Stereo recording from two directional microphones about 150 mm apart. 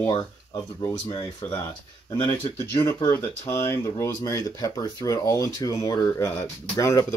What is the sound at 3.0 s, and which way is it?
Speech, 15° left (ahead or behind).